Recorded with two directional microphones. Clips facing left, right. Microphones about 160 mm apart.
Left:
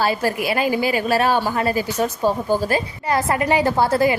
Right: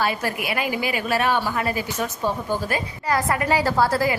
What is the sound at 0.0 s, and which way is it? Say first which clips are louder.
A woman's voice: left 4 dB; 30° left (ahead or behind).